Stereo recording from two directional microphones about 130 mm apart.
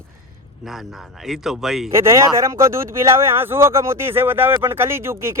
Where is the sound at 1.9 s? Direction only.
20° right (ahead or behind).